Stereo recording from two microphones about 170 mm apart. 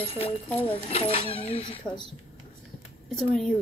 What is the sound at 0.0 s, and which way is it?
A child's voice, 35° left (ahead or behind).